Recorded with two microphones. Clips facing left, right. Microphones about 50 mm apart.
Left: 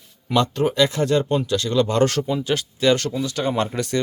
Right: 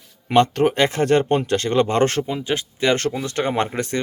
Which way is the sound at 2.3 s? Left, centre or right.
Right.